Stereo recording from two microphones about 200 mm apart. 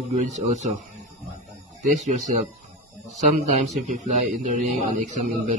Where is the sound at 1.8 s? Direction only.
35° right (ahead or behind).